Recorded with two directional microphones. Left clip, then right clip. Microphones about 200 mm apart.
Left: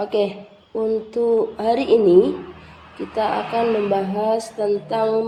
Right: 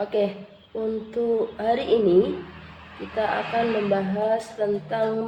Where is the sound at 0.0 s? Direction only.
35° left (ahead or behind).